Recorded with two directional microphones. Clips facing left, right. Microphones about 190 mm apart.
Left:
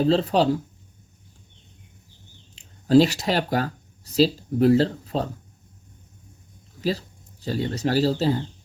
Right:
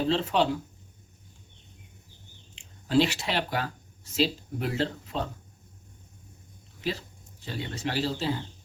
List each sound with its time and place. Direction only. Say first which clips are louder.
0.0 s speech: left 5 dB; 40° left (ahead or behind)
2.6 s speech: left 7 dB; 40° left (ahead or behind)
7.4 s speech: left 8 dB; 40° left (ahead or behind)